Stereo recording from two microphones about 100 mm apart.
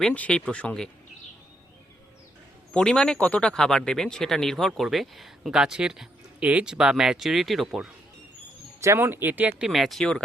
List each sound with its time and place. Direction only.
0.0 s speech: 15° left (ahead or behind)
2.7 s speech: 10° left (ahead or behind)
8.8 s speech: 25° right (ahead or behind)
9.6 s speech: centre (ahead or behind)